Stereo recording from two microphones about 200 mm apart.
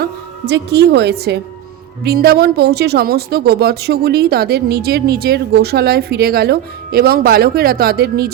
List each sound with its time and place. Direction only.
0.0 s a woman's voice: 55° right (ahead or behind)